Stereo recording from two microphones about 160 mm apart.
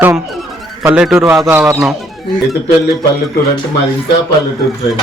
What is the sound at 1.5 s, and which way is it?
Speech, 15° right (ahead or behind).